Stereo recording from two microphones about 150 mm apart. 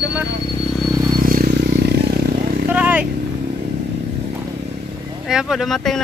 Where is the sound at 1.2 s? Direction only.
80° right.